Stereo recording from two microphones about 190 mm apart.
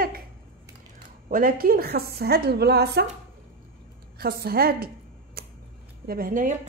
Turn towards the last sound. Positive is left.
turn(degrees=-45)  # may be behind; listen again after turning